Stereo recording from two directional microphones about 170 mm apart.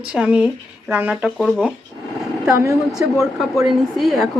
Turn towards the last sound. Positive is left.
turn(degrees=0)  # may be behind; listen again after turning